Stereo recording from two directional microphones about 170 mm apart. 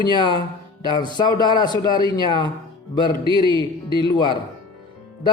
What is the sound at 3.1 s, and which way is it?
Speech, 30° right (ahead or behind).